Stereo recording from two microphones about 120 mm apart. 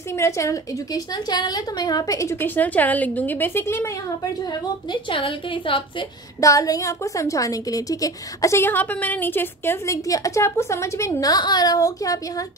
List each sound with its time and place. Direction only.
0.1 s a woman's voice: 25° left (ahead or behind)
4.9 s a woman's voice: 45° left (ahead or behind)
6.4 s a woman's voice: 30° left (ahead or behind)